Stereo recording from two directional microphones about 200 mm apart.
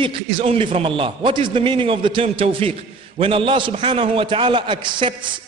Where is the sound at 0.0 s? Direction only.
30° right (ahead or behind).